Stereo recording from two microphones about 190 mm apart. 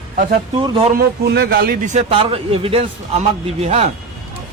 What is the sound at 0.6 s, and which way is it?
Speech, 25° right (ahead or behind).